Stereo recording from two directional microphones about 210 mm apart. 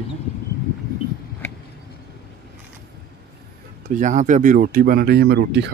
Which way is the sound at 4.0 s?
35° right (ahead or behind).